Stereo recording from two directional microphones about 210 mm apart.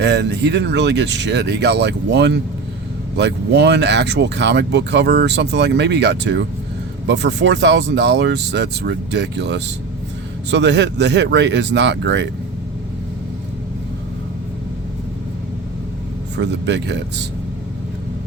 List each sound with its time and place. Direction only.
0.0 s speech: 55° right (ahead or behind)
16.4 s speech: 55° right (ahead or behind)